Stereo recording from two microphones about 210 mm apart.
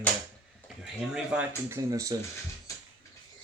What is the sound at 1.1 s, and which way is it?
Speech, 10° right (ahead or behind).